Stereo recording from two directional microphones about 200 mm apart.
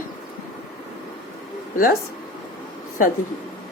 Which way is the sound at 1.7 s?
45° left (ahead or behind).